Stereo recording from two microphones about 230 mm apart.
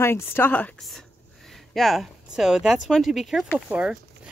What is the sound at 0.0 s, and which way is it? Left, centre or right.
Speech, centre.